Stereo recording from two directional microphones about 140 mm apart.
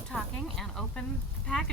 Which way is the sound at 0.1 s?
Centre (ahead or behind).